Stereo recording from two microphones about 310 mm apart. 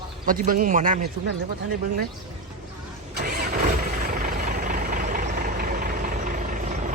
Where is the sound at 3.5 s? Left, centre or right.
Right.